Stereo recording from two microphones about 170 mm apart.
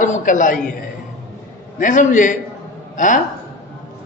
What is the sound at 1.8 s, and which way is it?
Speech, 50° left (ahead or behind).